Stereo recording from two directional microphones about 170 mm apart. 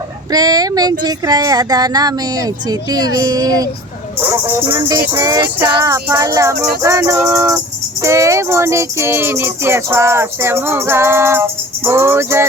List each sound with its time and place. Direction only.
0.3 s speech: 20° right (ahead or behind)
5.0 s music: 20° right (ahead or behind)